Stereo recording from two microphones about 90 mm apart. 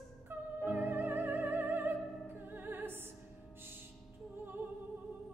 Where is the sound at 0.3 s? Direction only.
25° right (ahead or behind).